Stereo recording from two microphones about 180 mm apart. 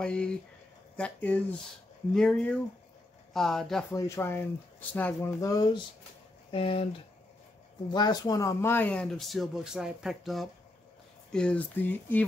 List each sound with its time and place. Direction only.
0.0 s speech: 5° left (ahead or behind)
3.9 s speech: 15° left (ahead or behind)